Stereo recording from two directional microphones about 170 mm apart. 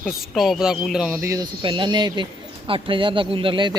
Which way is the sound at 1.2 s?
15° right (ahead or behind).